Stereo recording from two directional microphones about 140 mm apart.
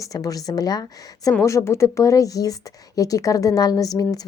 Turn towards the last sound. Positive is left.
turn(degrees=25)  # may be behind; listen again after turning